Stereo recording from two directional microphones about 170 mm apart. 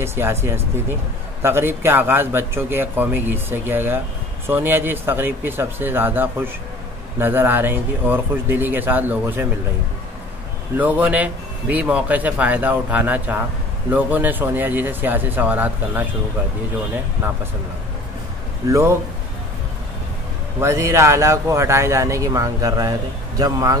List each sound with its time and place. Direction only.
0.0 s speech: 15° right (ahead or behind)
10.8 s speech: 10° right (ahead or behind)
18.7 s speech: 15° right (ahead or behind)
20.6 s speech: 15° right (ahead or behind)